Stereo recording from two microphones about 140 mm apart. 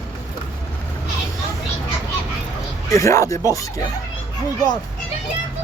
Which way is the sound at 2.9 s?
20° left (ahead or behind).